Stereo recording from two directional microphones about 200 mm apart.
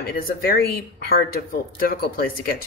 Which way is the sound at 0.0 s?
45° left (ahead or behind).